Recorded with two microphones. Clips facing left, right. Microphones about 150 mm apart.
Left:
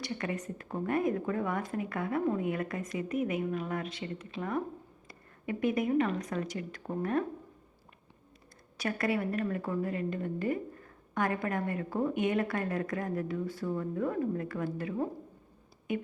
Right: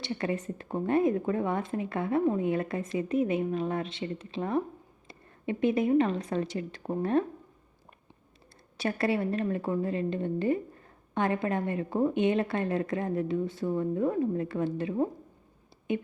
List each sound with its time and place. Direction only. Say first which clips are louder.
0.0 s a woman's voice: right 4 dB; 30° right (ahead or behind)
8.8 s a woman's voice: right 3 dB; 30° right (ahead or behind)